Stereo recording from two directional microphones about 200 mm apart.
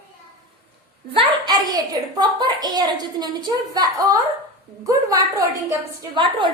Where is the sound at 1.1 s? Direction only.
25° right (ahead or behind).